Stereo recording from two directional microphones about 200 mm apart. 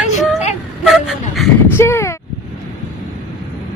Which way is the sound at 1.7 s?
15° left (ahead or behind).